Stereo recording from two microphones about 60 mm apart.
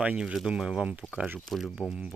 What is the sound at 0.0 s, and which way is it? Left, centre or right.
Speech, right.